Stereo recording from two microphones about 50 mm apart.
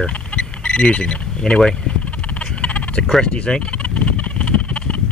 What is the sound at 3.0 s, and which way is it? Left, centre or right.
Speech, centre.